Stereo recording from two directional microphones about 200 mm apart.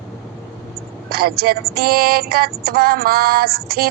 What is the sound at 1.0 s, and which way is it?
Music, 50° right (ahead or behind).